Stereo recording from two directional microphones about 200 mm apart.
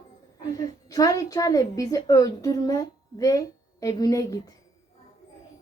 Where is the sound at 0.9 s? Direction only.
15° left (ahead or behind).